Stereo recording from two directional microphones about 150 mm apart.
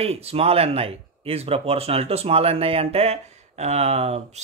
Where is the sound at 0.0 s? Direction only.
40° right (ahead or behind).